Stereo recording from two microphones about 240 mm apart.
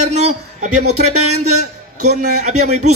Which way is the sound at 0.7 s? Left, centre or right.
Right.